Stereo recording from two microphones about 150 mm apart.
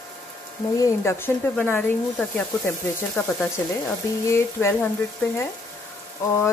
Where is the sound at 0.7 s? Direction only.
20° left (ahead or behind).